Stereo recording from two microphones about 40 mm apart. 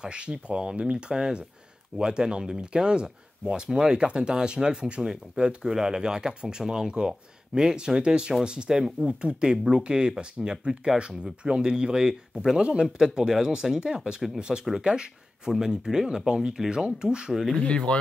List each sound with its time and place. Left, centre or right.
0.0 s speech: right
13.0 s speech: centre
17.6 s speech: left